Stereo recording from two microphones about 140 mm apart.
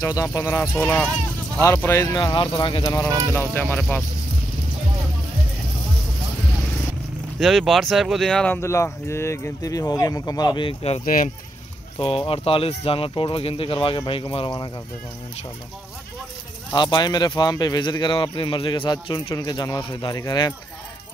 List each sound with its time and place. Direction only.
0.0 s speech: 25° left (ahead or behind)
2.1 s speech: 30° left (ahead or behind)
3.1 s speech: 25° right (ahead or behind)
3.3 s speech: 15° left (ahead or behind)
7.3 s speech: centre (ahead or behind)
8.5 s speech: 20° left (ahead or behind); by 11.0 s 45° left (ahead or behind)
12.0 s speech: 40° left (ahead or behind)
16.7 s speech: 35° left (ahead or behind)